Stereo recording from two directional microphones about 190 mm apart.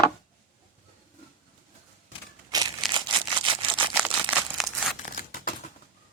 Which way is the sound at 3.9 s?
10° right (ahead or behind).